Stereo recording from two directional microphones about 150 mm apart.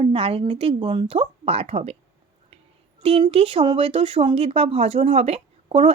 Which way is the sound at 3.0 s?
40° right (ahead or behind).